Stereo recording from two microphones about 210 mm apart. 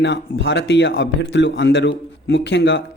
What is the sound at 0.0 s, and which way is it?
A man's voice, 60° left (ahead or behind).